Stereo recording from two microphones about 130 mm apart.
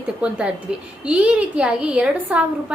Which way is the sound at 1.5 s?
10° right (ahead or behind).